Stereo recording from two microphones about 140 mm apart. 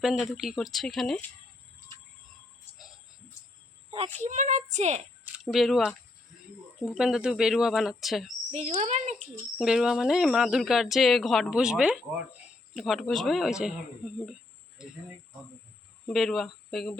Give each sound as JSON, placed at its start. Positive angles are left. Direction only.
{"t": 0.0, "sound": "speech", "side_deg": 0}
{"t": 4.2, "sound": "speech", "side_deg": -60}
{"t": 5.5, "sound": "speech", "side_deg": 0}
{"t": 8.4, "sound": "speech", "side_deg": -55}
{"t": 9.6, "sound": "speech", "side_deg": -5}
{"t": 14.8, "sound": "speech", "side_deg": -5}
{"t": 16.0, "sound": "speech", "side_deg": 0}